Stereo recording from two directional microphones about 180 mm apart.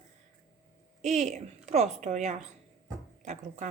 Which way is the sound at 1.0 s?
40° right (ahead or behind).